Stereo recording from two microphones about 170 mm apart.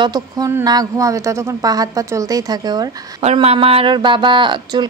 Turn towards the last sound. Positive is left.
turn(degrees=-25)  # may be behind; listen again after turning